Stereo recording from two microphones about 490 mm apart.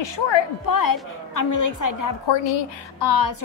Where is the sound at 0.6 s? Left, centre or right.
Left.